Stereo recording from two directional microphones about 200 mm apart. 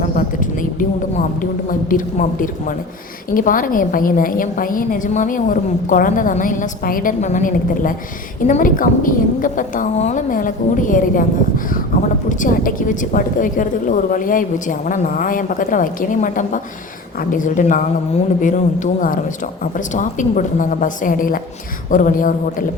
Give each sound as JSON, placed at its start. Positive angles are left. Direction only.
{"t": 0.2, "sound": "a woman's voice", "side_deg": 40}
{"t": 1.9, "sound": "a woman's voice", "side_deg": 40}